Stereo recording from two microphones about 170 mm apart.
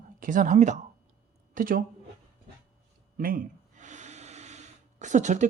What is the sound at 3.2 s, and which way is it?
Speech, 55° right (ahead or behind).